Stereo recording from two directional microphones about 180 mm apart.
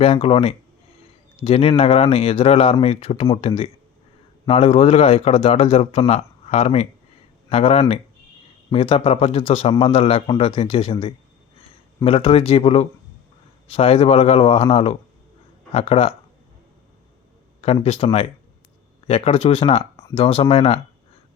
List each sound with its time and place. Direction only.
0.0 s speech: 35° left (ahead or behind)
12.0 s speech: 30° left (ahead or behind)
17.6 s speech: 35° left (ahead or behind)